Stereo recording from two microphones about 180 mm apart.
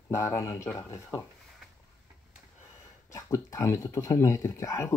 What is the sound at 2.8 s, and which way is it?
Speech, 15° left (ahead or behind).